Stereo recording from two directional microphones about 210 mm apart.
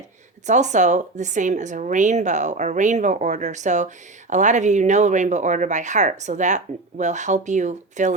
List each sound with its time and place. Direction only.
0.4 s speech: 35° right (ahead or behind)